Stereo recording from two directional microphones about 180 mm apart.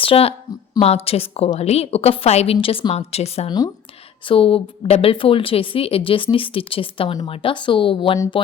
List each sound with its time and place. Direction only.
0.0 s a woman's voice: 30° left (ahead or behind)